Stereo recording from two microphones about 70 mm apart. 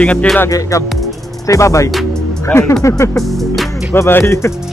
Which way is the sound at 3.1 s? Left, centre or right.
Centre.